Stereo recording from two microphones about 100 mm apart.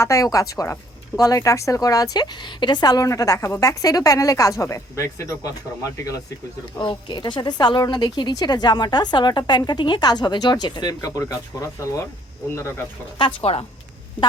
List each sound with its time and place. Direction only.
0.0 s a woman's voice: 35° left (ahead or behind)
6.7 s a woman's voice: 50° left (ahead or behind)
11.0 s a woman's voice: 35° left (ahead or behind)
13.4 s speech: 80° left